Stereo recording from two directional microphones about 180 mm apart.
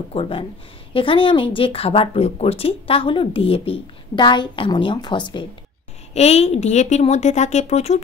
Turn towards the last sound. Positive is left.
turn(degrees=35)  # may be behind; listen again after turning